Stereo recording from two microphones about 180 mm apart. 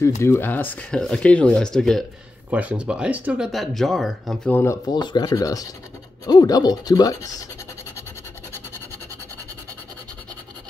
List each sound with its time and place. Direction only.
0.2 s speech: 15° left (ahead or behind)
4.6 s speech: 20° left (ahead or behind)